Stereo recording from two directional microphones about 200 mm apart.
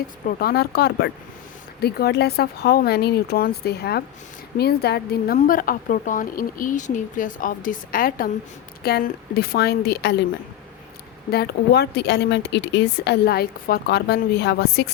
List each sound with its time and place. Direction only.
0.3 s a woman's voice: 50° left (ahead or behind)
11.3 s a woman's voice: 55° left (ahead or behind)